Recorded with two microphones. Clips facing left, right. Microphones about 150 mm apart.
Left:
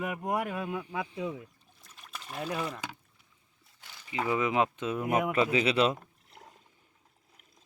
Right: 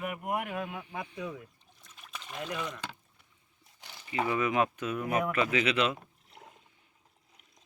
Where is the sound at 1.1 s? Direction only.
25° left (ahead or behind).